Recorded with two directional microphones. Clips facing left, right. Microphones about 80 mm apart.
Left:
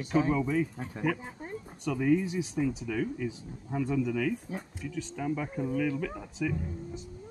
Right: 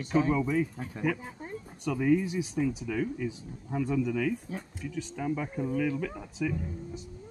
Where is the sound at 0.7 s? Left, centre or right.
Left.